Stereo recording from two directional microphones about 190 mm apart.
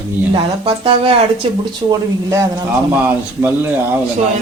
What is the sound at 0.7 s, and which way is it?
Speech, 30° right (ahead or behind).